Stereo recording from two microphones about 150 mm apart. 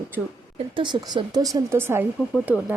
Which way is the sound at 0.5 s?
35° right (ahead or behind).